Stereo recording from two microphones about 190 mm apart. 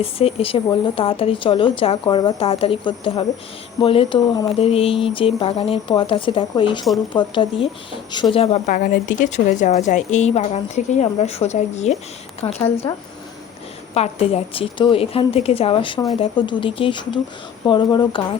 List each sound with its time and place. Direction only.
0.0 s a woman's voice: 30° left (ahead or behind)
12.9 s speech: 20° left (ahead or behind)
13.9 s speech: 35° left (ahead or behind)